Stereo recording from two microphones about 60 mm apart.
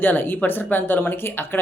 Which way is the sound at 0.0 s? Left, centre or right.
Left.